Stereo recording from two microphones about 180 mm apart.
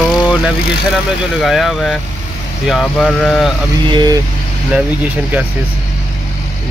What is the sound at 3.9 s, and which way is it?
Speech, 25° right (ahead or behind).